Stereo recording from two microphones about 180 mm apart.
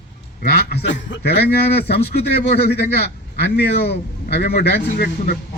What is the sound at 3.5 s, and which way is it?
A man's voice, 65° left (ahead or behind).